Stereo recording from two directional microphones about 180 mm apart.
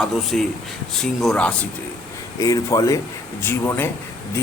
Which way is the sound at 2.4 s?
20° left (ahead or behind).